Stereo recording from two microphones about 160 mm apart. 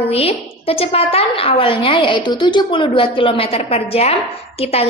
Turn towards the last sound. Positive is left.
turn(degrees=40)  # may be behind; listen again after turning